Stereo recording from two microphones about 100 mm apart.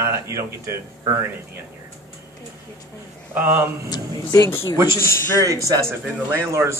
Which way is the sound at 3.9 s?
30° left (ahead or behind).